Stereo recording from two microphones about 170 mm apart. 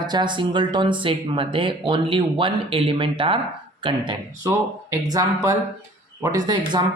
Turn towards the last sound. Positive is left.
turn(degrees=-25)  # may be behind; listen again after turning